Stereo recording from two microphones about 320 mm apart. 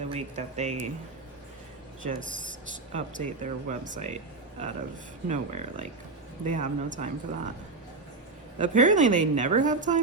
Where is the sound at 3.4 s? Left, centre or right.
Right.